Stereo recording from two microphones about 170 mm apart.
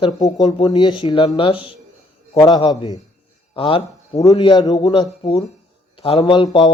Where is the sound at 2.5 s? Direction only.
30° left (ahead or behind).